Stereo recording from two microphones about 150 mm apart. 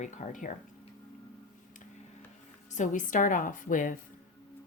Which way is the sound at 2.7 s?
55° left (ahead or behind).